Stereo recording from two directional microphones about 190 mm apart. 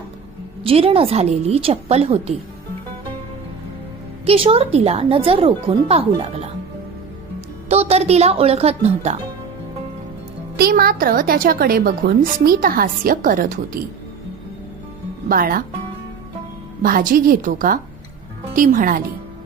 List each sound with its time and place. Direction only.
0.6 s a woman's voice: 30° right (ahead or behind)
4.3 s a woman's voice: 30° right (ahead or behind)
7.7 s a woman's voice: 35° right (ahead or behind)
10.6 s a woman's voice: 50° right (ahead or behind)
15.3 s a woman's voice: 50° right (ahead or behind)
16.8 s a woman's voice: 50° right (ahead or behind)